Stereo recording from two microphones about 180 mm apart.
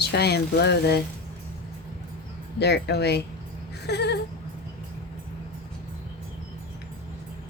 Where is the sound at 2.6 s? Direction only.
65° left (ahead or behind).